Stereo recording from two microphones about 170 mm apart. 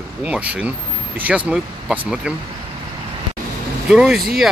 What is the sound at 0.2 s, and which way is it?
Speech, 10° right (ahead or behind).